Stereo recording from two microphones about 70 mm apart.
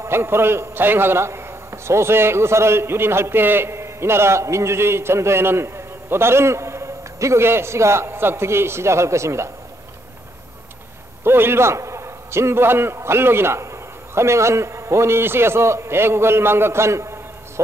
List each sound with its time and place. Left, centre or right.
0.0 s a man's voice: right
11.2 s a man's voice: right